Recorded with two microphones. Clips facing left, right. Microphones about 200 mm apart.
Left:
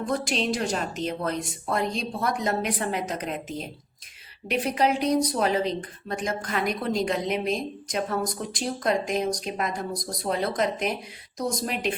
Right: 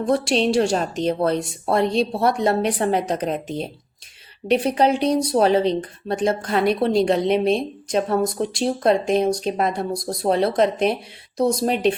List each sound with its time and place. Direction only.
0.0 s speech: 30° right (ahead or behind)